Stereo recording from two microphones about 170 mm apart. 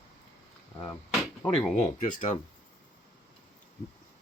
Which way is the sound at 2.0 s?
50° left (ahead or behind).